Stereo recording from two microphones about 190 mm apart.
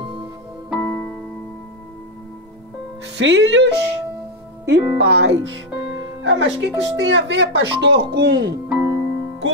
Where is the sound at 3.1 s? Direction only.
65° right (ahead or behind).